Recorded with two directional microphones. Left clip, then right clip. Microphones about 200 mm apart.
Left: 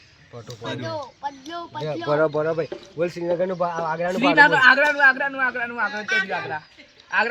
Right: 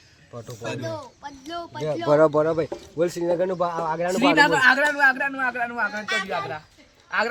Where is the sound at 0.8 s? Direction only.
25° left (ahead or behind).